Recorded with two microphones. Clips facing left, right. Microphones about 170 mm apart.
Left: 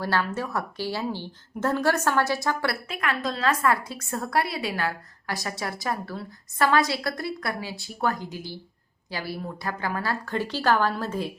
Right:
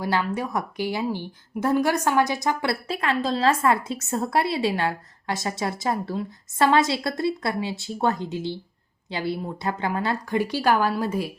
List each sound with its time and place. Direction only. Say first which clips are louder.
0.0 s a woman's voice: right 2 dB; 15° right (ahead or behind)
2.8 s a woman's voice: right 4 dB; 30° right (ahead or behind); by 11.3 s 10° right (ahead or behind)